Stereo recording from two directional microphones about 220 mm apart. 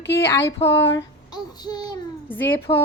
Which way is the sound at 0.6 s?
30° left (ahead or behind).